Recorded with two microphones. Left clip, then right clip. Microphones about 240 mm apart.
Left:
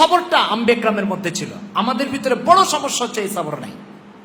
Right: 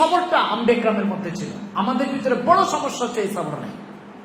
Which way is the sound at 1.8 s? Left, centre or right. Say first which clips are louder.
Left 3 dB; left.